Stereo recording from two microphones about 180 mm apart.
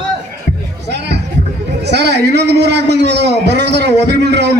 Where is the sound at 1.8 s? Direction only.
70° right (ahead or behind).